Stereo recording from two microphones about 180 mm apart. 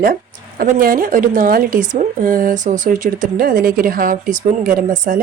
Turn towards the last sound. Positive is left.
turn(degrees=-50)  # may be behind; listen again after turning